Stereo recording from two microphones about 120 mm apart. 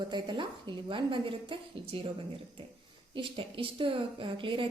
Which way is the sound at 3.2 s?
45° right (ahead or behind).